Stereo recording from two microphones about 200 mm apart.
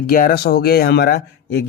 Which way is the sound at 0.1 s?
50° left (ahead or behind).